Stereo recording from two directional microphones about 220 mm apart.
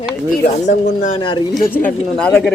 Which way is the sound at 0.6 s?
35° left (ahead or behind).